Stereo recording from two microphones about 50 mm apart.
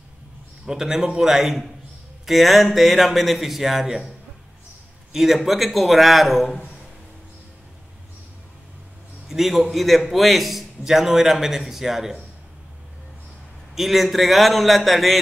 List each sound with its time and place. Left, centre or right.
0.7 s a man's voice: centre
5.1 s a man's voice: centre
9.3 s a man's voice: centre
13.7 s a man's voice: centre